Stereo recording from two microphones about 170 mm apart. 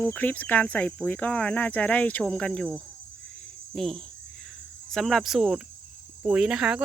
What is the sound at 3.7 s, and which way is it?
Cricket, centre (ahead or behind).